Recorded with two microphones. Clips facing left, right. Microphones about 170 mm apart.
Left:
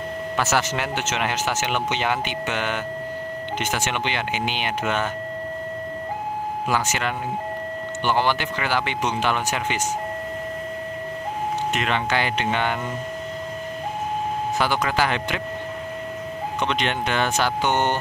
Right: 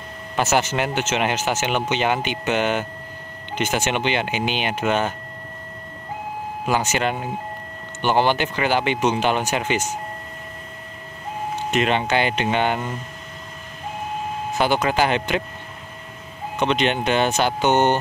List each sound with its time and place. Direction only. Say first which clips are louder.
0.4 s speech: right 4 dB; 20° right (ahead or behind)
6.7 s speech: right 4 dB; 20° right (ahead or behind)
11.8 s speech: right 6 dB; 20° right (ahead or behind)
14.6 s speech: right 4 dB; 25° right (ahead or behind)
16.5 s speech: right 5 dB; 25° right (ahead or behind)